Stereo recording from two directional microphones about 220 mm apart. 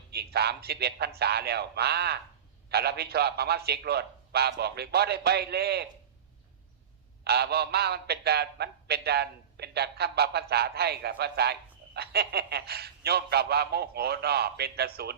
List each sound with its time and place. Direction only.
0.1 s a man's voice: 45° right (ahead or behind)
7.3 s a man's voice: 45° right (ahead or behind)